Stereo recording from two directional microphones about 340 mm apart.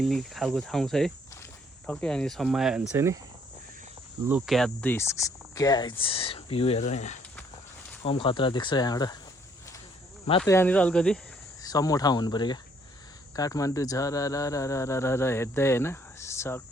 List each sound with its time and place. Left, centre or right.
0.0 s speech: centre
4.3 s speech: centre
10.2 s speech: centre